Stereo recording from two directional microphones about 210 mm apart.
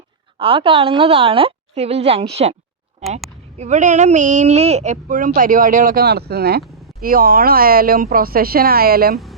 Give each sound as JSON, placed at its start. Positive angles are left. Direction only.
{"t": 0.3, "sound": "a woman's voice", "side_deg": -25}
{"t": 3.6, "sound": "speech", "side_deg": -35}
{"t": 6.6, "sound": "a sound", "side_deg": 0}
{"t": 7.0, "sound": "speech", "side_deg": -45}